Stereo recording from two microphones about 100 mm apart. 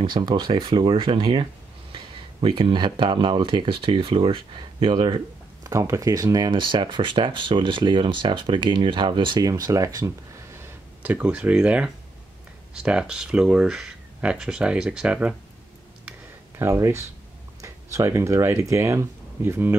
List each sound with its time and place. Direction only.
0.0 s speech: 50° right (ahead or behind)
5.6 s speech: 30° right (ahead or behind); by 9.5 s 50° right (ahead or behind)
9.5 s speech: 35° right (ahead or behind)
10.6 s speech: 15° right (ahead or behind)
16.5 s speech: 30° right (ahead or behind)